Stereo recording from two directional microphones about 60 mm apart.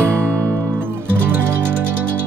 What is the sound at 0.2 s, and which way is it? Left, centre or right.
Music, right.